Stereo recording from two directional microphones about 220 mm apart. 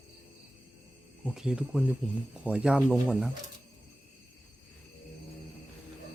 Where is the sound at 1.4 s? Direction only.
5° right (ahead or behind).